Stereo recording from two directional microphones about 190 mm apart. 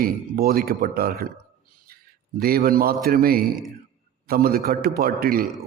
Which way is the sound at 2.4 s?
50° right (ahead or behind).